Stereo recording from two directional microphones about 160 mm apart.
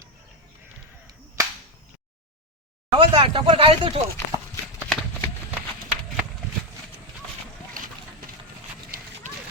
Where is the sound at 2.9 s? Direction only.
30° right (ahead or behind).